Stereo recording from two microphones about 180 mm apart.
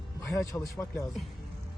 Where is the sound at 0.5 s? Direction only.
15° left (ahead or behind).